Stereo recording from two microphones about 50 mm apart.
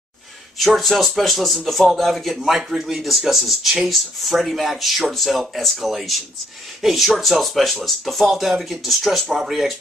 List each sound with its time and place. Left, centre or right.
0.6 s speech: centre